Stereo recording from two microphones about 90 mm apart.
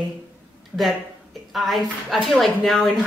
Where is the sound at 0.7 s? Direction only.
15° right (ahead or behind).